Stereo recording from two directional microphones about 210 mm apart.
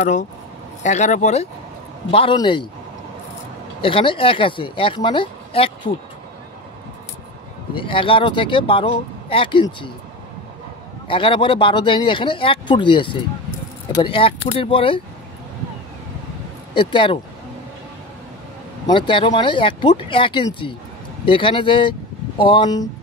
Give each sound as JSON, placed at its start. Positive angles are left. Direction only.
{"t": 0.0, "sound": "speech", "side_deg": 35}
{"t": 3.8, "sound": "speech", "side_deg": 25}
{"t": 7.7, "sound": "speech", "side_deg": 25}
{"t": 11.1, "sound": "speech", "side_deg": 25}
{"t": 16.7, "sound": "speech", "side_deg": 25}
{"t": 18.9, "sound": "speech", "side_deg": 25}